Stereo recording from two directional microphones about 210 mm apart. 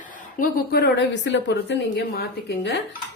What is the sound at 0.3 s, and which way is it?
A woman's voice, 45° left (ahead or behind).